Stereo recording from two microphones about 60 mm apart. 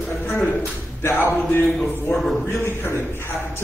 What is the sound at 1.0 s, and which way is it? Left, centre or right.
A man's voice, left.